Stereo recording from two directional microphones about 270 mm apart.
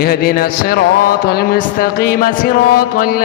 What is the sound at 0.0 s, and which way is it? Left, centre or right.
Mantra, left.